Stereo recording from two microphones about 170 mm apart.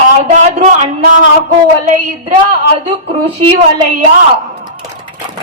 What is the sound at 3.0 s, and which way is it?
Speech, 35° right (ahead or behind).